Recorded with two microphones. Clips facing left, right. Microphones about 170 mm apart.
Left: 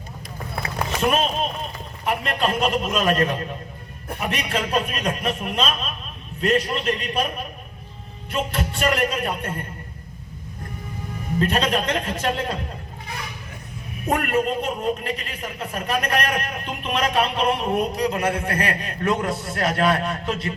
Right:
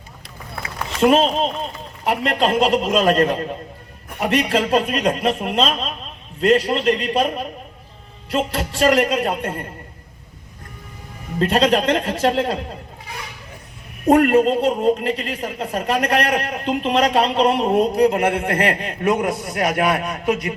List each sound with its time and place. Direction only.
1.0 s a man's voice: 25° right (ahead or behind)
11.3 s a man's voice: 30° right (ahead or behind)
14.1 s speech: 30° right (ahead or behind)
17.9 s a man's voice: 60° right (ahead or behind)
18.4 s a man's voice: 25° right (ahead or behind)